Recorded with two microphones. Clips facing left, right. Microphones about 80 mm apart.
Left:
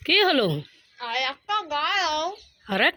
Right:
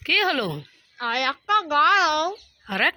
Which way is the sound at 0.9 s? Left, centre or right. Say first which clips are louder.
Right 4 dB; right.